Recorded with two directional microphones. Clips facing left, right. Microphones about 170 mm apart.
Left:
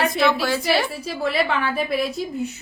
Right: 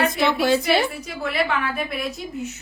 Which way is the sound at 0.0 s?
20° right (ahead or behind).